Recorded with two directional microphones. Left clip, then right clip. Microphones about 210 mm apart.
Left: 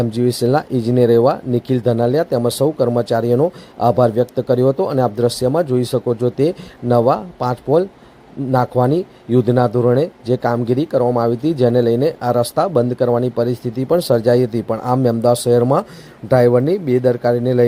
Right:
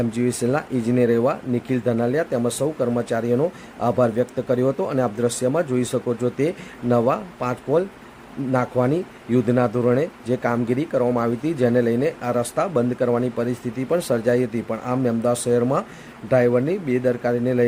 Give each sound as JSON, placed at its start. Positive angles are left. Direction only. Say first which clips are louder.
{"t": 0.0, "sound": "speech", "louder": "left 6 dB", "side_deg": 25}